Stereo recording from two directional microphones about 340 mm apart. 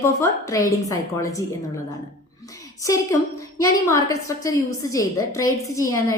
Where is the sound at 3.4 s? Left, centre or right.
Centre.